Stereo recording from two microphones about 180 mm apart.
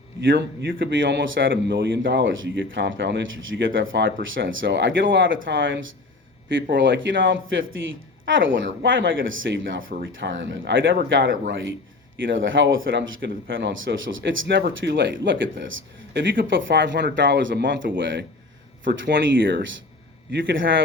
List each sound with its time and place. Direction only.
0.2 s speech: 85° right
18.9 s speech: 70° right (ahead or behind); by 20.8 s 90° right